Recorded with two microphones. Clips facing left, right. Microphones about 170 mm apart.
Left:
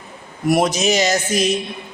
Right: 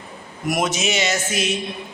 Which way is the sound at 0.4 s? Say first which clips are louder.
Left 6 dB; 35° left (ahead or behind).